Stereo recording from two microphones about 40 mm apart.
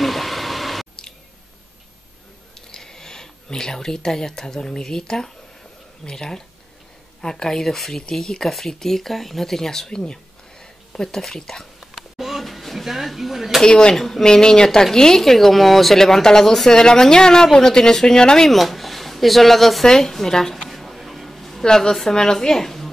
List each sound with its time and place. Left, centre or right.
0.0 s a sound: centre
2.7 s speech: centre
11.8 s a sound: centre
13.7 s a woman's voice: centre
13.9 s speech: centre
14.2 s speech: centre
18.5 s speech: centre
20.7 s a sound: centre
21.6 s speech: centre